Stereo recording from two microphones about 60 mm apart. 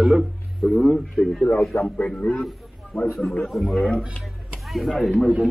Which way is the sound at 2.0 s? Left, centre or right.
Left.